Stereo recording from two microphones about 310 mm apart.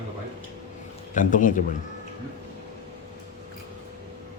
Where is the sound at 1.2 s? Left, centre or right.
Left.